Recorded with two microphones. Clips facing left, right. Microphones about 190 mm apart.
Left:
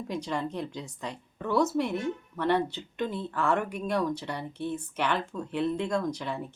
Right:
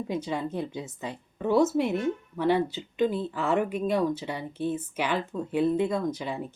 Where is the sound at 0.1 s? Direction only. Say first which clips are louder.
Even; centre (ahead or behind).